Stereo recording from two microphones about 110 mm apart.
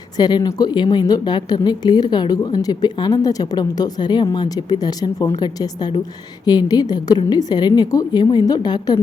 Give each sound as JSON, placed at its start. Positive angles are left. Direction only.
{"t": 0.2, "sound": "a woman's voice", "side_deg": 40}